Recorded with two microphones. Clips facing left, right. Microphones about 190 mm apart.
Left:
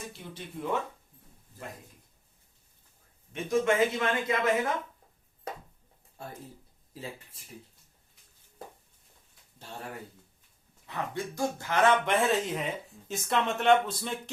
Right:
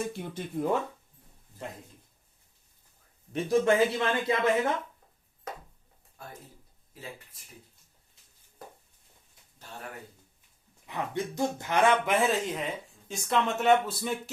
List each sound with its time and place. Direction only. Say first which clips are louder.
0.2 s speech: right 7 dB; 45° right (ahead or behind)
3.3 s speech: right 2 dB; 30° right (ahead or behind)
6.2 s speech: left 3 dB; 30° left (ahead or behind)
10.8 s speech: right 2 dB; 20° right (ahead or behind)
12.1 s speech: even; centre (ahead or behind)